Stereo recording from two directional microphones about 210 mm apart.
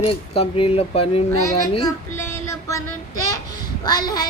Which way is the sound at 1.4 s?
15° left (ahead or behind).